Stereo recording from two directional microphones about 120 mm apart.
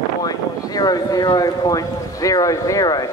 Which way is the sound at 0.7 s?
35° left (ahead or behind).